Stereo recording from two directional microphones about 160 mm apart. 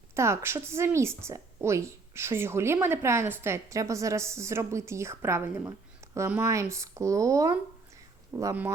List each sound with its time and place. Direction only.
0.1 s speech: 15° right (ahead or behind)